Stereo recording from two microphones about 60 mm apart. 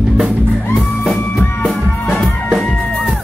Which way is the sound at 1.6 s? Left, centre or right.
Centre.